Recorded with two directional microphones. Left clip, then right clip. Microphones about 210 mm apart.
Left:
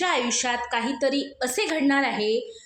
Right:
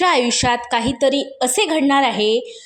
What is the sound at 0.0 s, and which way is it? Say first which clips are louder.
A woman's voice: right 8 dB; 45° right (ahead or behind).